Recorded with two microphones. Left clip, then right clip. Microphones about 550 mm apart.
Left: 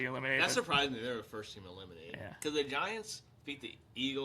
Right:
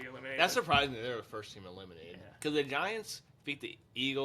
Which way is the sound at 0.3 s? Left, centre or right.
Right.